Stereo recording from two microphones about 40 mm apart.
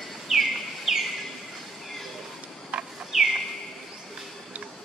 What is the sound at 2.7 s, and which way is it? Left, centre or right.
Bird, right.